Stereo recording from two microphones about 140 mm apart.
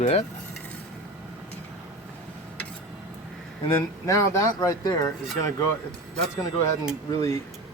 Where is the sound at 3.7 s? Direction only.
20° left (ahead or behind).